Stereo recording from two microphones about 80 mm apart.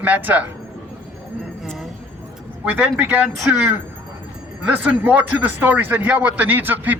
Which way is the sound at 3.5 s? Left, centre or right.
Centre.